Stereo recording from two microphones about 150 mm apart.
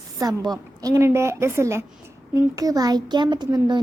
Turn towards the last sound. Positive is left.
turn(degrees=-30)  # may be behind; listen again after turning